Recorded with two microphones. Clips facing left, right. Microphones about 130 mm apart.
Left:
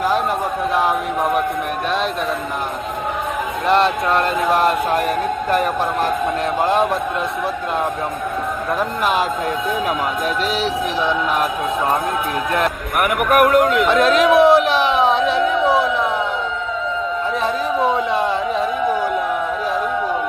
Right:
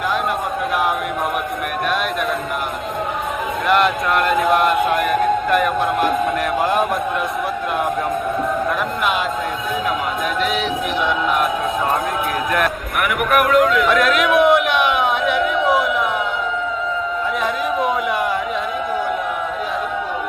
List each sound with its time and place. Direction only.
3.7 s music: 30° left (ahead or behind)
6.6 s speech: 25° left (ahead or behind)
10.5 s music: 35° left (ahead or behind)
13.3 s speech: 45° left (ahead or behind)
13.8 s a sound: 30° left (ahead or behind)
17.4 s a sound: 30° left (ahead or behind)